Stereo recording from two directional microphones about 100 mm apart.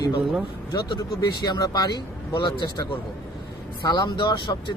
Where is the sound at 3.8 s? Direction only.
45° left (ahead or behind).